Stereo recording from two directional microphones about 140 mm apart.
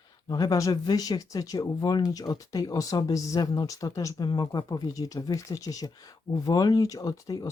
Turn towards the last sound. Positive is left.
turn(degrees=25)  # may be behind; listen again after turning